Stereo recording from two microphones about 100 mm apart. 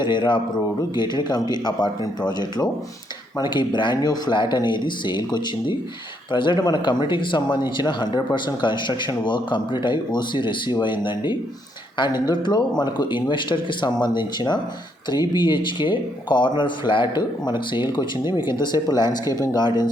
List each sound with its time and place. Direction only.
0.0 s speech: 50° left (ahead or behind)